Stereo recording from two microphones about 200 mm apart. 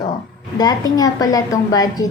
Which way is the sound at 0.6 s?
20° left (ahead or behind).